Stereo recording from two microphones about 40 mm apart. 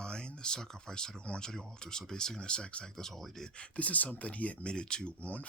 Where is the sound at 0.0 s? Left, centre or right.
Left.